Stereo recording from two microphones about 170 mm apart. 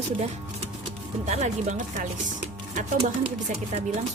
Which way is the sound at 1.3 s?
45° right (ahead or behind).